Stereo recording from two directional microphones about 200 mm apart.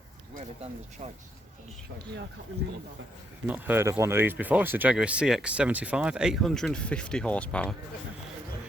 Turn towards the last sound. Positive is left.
turn(degrees=5)  # may be behind; listen again after turning